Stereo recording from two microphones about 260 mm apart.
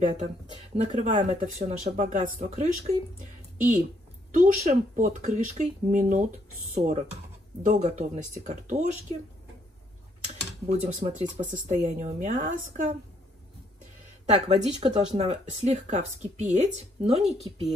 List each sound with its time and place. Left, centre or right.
0.7 s speech: right
10.2 s speech: right
14.2 s speech: right